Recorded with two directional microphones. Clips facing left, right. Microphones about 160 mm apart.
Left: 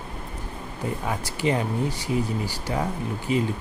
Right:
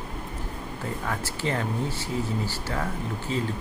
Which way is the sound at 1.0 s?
15° left (ahead or behind).